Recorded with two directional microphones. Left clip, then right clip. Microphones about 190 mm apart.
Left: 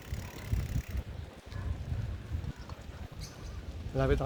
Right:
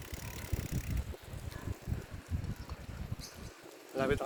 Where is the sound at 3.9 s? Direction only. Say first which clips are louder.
Left 2 dB; 10° right (ahead or behind).